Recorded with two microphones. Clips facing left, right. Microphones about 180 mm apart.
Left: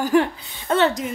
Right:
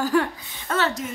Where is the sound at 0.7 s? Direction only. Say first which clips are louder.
Left 6 dB; 30° left (ahead or behind).